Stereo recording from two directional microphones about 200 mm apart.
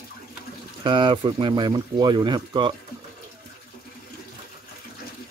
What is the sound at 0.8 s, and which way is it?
Speech, 25° right (ahead or behind).